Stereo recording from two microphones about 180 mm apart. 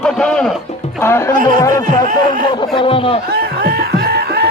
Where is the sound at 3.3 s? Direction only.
55° right (ahead or behind).